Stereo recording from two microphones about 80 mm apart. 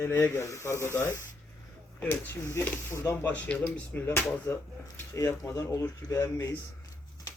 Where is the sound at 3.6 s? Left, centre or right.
Left.